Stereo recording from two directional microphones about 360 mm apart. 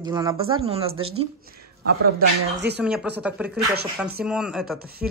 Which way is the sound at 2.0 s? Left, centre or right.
Right.